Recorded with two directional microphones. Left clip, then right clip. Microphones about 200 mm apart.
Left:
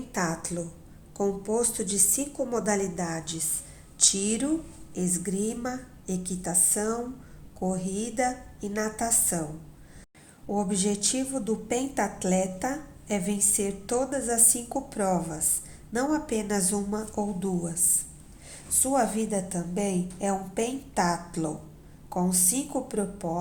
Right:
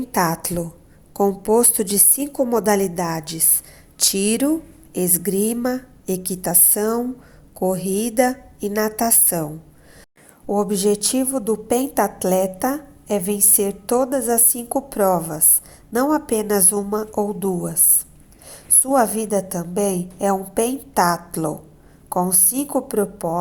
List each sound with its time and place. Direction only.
0.1 s a woman's voice: 40° right (ahead or behind)